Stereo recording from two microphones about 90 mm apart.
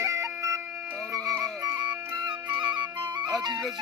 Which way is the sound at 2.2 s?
60° right (ahead or behind).